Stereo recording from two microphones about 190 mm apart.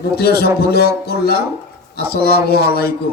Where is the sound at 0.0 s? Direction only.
55° left (ahead or behind).